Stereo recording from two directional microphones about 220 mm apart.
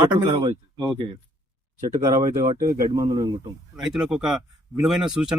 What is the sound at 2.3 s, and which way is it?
Speech, 15° right (ahead or behind).